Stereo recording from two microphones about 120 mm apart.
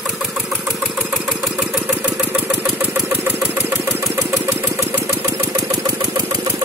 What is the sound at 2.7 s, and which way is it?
Engine, 5° right (ahead or behind).